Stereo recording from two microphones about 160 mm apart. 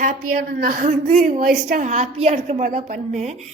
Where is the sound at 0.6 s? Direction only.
55° right (ahead or behind).